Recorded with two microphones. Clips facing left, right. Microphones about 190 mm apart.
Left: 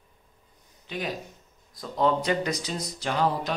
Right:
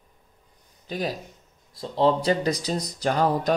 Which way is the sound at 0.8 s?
40° right (ahead or behind).